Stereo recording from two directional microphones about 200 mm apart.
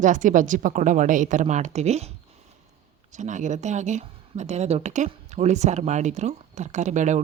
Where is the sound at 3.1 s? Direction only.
35° right (ahead or behind).